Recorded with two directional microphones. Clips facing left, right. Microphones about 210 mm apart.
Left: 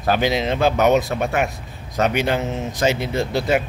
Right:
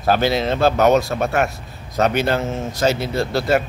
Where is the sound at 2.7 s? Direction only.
15° left (ahead or behind).